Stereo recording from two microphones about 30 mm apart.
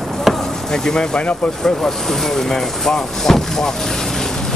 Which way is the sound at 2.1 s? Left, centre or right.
Centre.